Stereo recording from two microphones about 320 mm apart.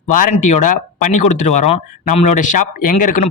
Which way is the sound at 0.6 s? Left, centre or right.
Left.